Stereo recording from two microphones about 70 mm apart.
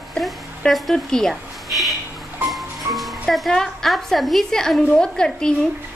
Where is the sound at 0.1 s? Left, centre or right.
Centre.